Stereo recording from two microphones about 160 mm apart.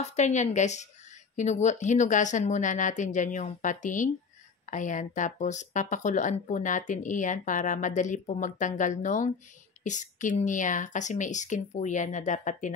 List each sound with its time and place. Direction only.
0.0 s speech: 45° left (ahead or behind)